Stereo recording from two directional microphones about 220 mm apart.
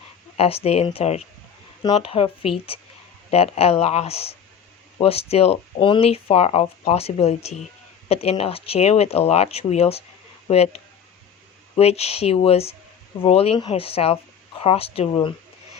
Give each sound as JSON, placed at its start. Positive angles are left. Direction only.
{"t": 0.3, "sound": "speech", "side_deg": 25}
{"t": 11.8, "sound": "speech", "side_deg": 30}